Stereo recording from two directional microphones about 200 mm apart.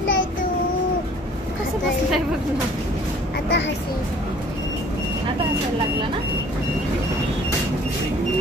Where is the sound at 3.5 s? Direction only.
60° left (ahead or behind).